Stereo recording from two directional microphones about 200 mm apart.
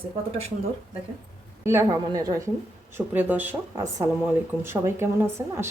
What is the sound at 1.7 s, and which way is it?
Speech, 15° right (ahead or behind).